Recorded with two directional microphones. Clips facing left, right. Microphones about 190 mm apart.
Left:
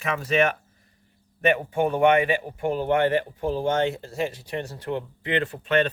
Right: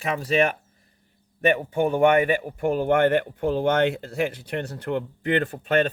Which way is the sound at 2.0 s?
45° right (ahead or behind).